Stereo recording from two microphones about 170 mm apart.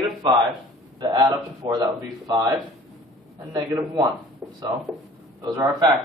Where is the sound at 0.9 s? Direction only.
25° right (ahead or behind).